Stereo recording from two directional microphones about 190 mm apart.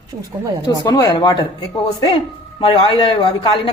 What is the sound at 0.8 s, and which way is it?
Speech, 20° left (ahead or behind).